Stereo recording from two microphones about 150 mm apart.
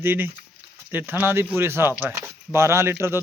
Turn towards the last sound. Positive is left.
turn(degrees=-15)  # may be behind; listen again after turning